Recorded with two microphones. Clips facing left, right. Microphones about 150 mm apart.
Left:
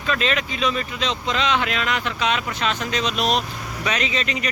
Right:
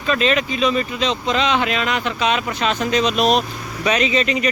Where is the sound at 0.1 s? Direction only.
5° right (ahead or behind).